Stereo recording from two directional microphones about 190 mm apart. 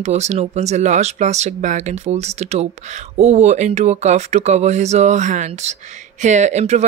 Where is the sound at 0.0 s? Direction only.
35° right (ahead or behind).